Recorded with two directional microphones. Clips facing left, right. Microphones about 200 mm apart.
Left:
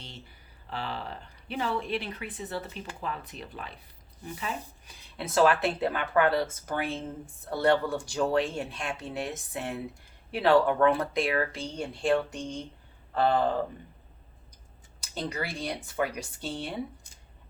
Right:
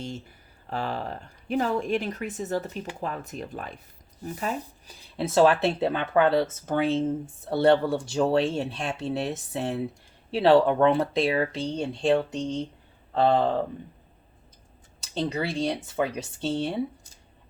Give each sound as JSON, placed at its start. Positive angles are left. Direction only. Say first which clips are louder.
{"t": 0.0, "sound": "speech", "louder": "right 11 dB", "side_deg": -45}
{"t": 5.1, "sound": "speech", "louder": "right 4 dB", "side_deg": -30}
{"t": 15.1, "sound": "speech", "louder": "right 6 dB", "side_deg": -25}